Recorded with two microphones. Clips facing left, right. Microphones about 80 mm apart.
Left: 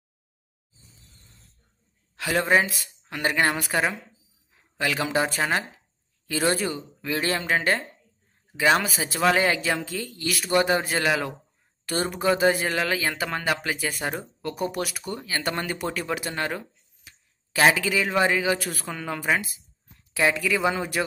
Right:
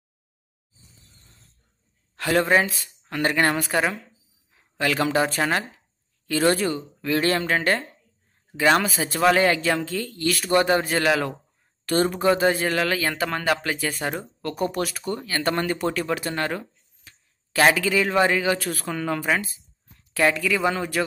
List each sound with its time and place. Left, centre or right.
2.1 s speech: centre
4.7 s speech: centre